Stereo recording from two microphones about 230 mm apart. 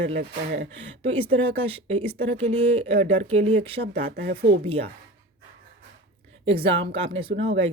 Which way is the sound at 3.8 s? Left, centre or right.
Right.